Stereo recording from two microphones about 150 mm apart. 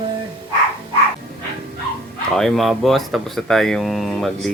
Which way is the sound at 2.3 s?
Centre (ahead or behind).